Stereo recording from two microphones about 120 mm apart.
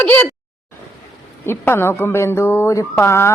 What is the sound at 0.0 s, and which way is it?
Speech, 15° left (ahead or behind).